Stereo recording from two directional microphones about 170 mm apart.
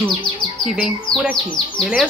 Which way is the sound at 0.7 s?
5° right (ahead or behind).